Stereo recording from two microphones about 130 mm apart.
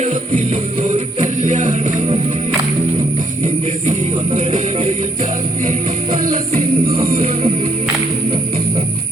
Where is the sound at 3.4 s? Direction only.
85° right.